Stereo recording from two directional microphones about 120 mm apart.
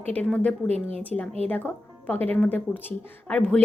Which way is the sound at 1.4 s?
15° left (ahead or behind).